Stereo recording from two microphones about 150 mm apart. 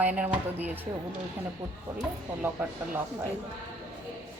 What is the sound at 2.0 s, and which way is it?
Speech, 10° right (ahead or behind).